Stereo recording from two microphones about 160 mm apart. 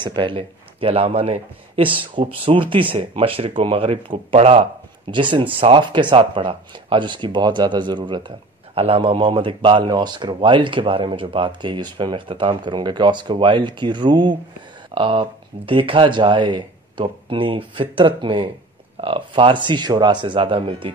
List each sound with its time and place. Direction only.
0.0 s a man's voice: 30° right (ahead or behind)